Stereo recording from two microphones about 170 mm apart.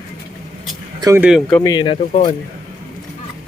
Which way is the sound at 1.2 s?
Centre (ahead or behind).